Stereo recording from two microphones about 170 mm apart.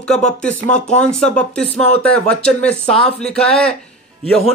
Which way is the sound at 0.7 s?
45° left (ahead or behind).